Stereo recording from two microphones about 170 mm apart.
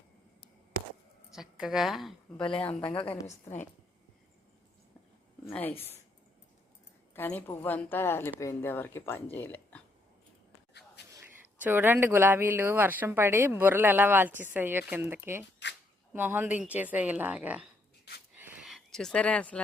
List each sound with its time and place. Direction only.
1.3 s a woman's voice: 5° right (ahead or behind)
2.6 s speech: 10° left (ahead or behind)
3.2 s a woman's voice: 45° left (ahead or behind)
5.5 s speech: 10° left (ahead or behind)
7.1 s speech: 10° left (ahead or behind)
11.1 s speech: 15° right (ahead or behind)
18.1 s a sound: 70° left (ahead or behind)
18.6 s speech: centre (ahead or behind)